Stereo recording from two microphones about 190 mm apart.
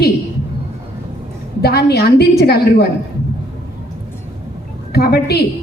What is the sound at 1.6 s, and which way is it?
A woman's voice, 55° left (ahead or behind).